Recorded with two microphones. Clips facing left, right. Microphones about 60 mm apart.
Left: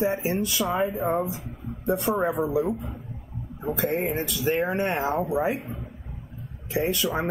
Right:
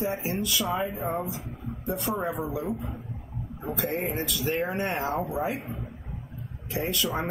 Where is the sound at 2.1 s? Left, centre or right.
Left.